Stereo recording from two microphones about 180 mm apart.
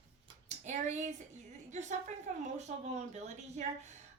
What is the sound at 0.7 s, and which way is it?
Speech, 40° right (ahead or behind).